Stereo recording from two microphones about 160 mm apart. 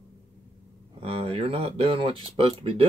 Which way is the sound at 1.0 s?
35° right (ahead or behind).